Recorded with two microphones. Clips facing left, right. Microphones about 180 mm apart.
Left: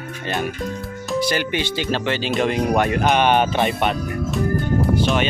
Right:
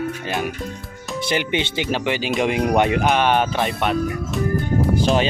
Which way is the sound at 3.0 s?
Centre (ahead or behind).